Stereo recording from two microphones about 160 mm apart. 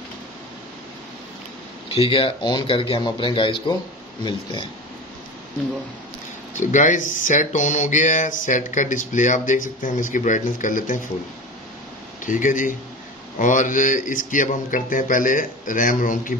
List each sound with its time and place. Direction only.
2.0 s speech: 35° left (ahead or behind)
6.5 s speech: 50° left (ahead or behind)
12.3 s a man's voice: 55° left (ahead or behind)